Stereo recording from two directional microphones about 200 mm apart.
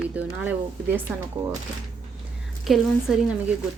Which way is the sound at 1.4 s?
25° right (ahead or behind).